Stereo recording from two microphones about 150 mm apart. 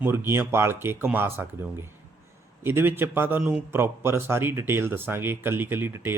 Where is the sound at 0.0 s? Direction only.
15° right (ahead or behind).